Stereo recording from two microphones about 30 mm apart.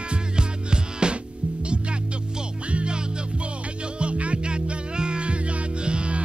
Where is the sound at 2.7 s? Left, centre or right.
Right.